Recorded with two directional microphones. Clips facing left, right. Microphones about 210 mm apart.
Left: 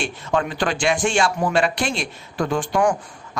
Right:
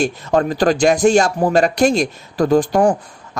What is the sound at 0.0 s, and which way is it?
Speech, 40° right (ahead or behind).